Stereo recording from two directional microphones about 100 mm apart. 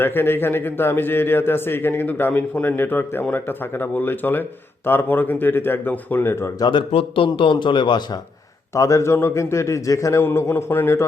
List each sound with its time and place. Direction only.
0.0 s a man's voice: 20° left (ahead or behind)
6.7 s a man's voice: 60° left (ahead or behind)
8.7 s a man's voice: 30° left (ahead or behind)